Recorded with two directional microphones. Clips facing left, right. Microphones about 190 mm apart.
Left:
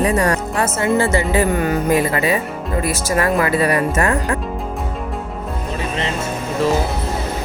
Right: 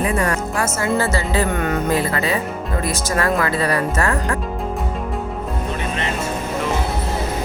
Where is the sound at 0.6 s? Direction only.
20° left (ahead or behind).